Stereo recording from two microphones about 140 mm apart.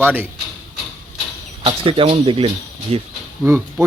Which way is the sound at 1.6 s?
40° right (ahead or behind).